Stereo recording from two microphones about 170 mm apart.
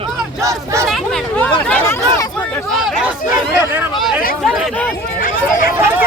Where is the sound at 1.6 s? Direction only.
5° left (ahead or behind).